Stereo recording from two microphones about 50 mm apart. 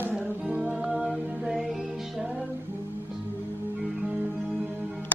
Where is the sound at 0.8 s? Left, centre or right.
Right.